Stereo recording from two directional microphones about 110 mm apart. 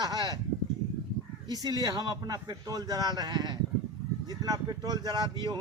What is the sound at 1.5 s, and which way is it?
Speech, 35° right (ahead or behind).